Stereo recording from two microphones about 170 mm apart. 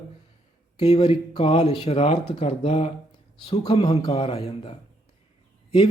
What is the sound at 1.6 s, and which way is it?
Speech, 40° left (ahead or behind).